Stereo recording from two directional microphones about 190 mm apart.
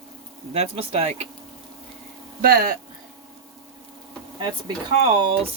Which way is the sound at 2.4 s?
50° right (ahead or behind).